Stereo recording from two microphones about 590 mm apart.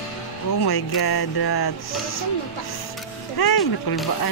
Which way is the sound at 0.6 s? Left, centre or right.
Left.